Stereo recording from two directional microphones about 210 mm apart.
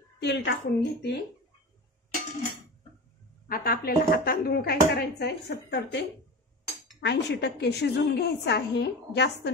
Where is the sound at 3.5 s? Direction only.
45° left (ahead or behind).